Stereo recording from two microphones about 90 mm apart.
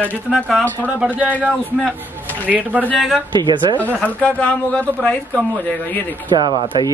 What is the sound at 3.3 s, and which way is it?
Speech, 55° right (ahead or behind).